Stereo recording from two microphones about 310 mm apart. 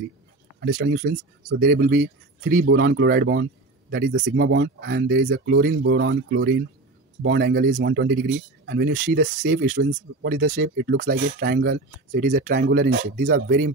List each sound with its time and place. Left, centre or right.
0.6 s speech: right